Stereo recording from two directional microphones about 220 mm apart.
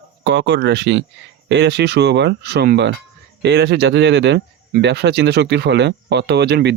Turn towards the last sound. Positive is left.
turn(degrees=-50)  # may be behind; listen again after turning